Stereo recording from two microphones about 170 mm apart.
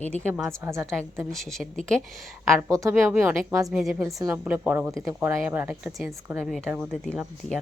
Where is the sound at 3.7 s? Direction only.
5° right (ahead or behind).